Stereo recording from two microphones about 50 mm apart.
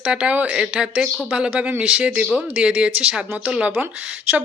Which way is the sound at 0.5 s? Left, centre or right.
Centre.